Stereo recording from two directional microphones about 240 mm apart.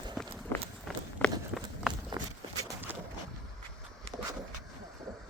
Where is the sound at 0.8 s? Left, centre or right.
Centre.